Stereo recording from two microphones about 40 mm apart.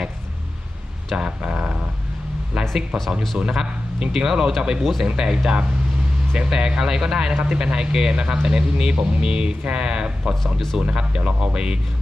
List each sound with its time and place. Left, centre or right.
1.1 s speech: right
4.8 s speech: centre
5.1 s speech: centre
10.4 s speech: centre
10.8 s speech: right